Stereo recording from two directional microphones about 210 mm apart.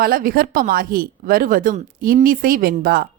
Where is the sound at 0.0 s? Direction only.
45° right (ahead or behind).